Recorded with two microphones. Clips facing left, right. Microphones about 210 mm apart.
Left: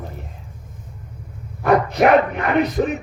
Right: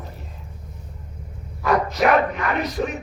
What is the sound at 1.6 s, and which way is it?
Speech, 60° left (ahead or behind).